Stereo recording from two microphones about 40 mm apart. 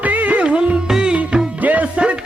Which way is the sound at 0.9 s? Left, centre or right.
Centre.